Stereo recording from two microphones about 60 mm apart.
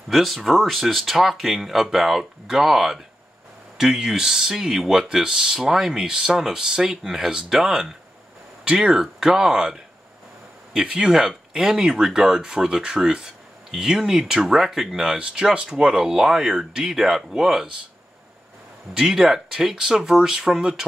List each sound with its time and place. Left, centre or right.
0.1 s speech: centre
15.1 s speech: centre
18.9 s speech: centre